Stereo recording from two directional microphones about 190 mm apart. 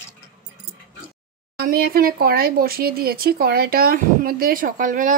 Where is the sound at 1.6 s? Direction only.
50° right (ahead or behind).